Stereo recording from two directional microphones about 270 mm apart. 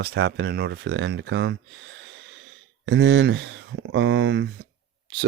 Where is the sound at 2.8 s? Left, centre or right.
Right.